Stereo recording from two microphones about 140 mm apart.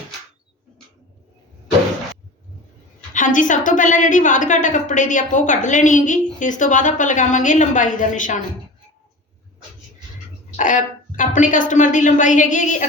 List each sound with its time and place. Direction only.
3.1 s a woman's voice: 70° left (ahead or behind)
10.6 s a woman's voice: 65° left (ahead or behind)